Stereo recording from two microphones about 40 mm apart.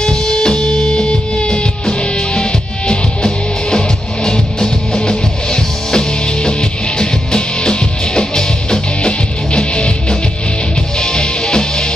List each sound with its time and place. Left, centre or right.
0.0 s music: centre